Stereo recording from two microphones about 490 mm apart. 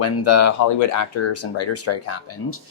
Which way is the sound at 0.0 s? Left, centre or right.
Left.